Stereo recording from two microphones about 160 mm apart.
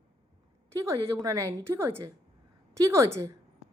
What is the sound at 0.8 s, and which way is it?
A woman's voice, 15° right (ahead or behind).